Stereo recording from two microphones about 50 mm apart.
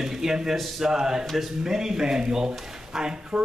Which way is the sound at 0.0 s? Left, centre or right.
Centre.